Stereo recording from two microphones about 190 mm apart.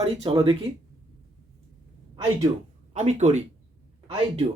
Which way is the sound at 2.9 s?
35° right (ahead or behind).